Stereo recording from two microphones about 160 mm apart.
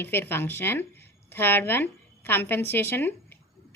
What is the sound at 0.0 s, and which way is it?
A woman's voice, 15° left (ahead or behind).